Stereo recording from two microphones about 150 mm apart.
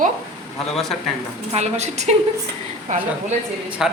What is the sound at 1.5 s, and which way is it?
Speech, 50° right (ahead or behind).